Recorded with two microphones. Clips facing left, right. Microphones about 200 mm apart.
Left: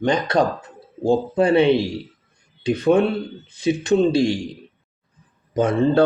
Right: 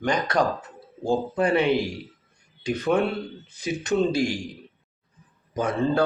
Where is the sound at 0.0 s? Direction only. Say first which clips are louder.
Left 4 dB; 30° left (ahead or behind).